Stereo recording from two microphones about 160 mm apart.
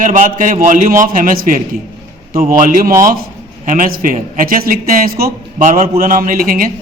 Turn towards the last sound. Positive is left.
turn(degrees=-60)  # may be behind; listen again after turning